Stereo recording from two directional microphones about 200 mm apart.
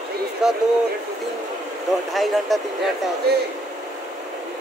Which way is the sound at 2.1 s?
Centre (ahead or behind).